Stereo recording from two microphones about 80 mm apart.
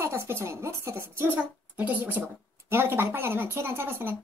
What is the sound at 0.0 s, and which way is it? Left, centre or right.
Speech, right.